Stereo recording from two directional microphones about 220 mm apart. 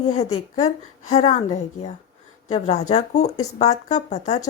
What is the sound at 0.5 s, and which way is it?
Speech, 30° left (ahead or behind).